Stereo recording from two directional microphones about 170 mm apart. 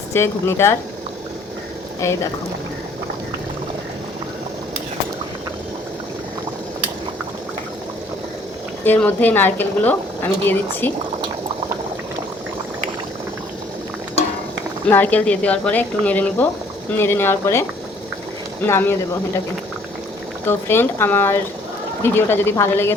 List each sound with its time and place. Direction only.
0.1 s speech: 15° left (ahead or behind)
2.0 s speech: 15° left (ahead or behind)
8.8 s speech: 10° left (ahead or behind)
14.8 s speech: 10° left (ahead or behind)
20.4 s speech: 15° left (ahead or behind)